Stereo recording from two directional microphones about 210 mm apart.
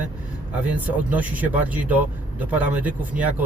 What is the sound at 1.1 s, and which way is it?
Speech, 5° right (ahead or behind).